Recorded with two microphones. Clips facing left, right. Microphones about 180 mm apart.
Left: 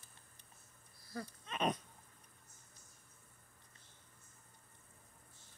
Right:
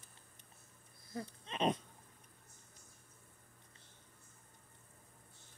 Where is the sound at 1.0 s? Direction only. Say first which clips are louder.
Right 1 dB; 25° right (ahead or behind).